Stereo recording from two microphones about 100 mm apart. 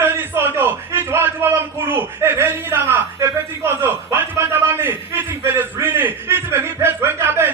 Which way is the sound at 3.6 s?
25° right (ahead or behind).